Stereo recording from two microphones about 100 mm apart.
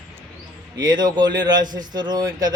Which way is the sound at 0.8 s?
45° right (ahead or behind).